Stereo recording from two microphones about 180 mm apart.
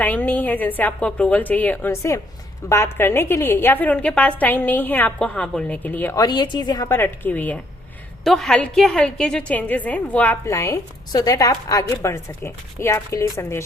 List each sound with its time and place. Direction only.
0.0 s a woman's voice: 10° left (ahead or behind)
6.2 s a woman's voice: 25° left (ahead or behind)